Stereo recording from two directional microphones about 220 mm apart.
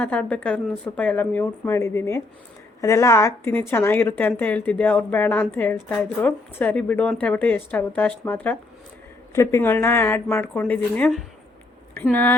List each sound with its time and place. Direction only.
0.0 s a woman's voice: 5° left (ahead or behind)